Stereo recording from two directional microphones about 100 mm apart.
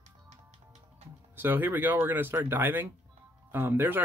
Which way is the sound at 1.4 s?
20° right (ahead or behind).